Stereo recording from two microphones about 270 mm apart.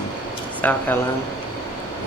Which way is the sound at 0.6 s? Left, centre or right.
Centre.